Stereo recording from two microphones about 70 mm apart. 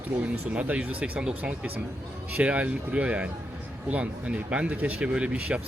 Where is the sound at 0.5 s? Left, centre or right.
Centre.